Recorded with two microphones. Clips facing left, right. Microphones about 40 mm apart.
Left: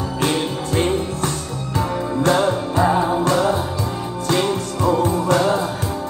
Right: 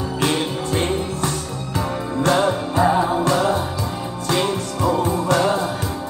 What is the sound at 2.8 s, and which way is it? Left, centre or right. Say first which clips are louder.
Music: even; centre.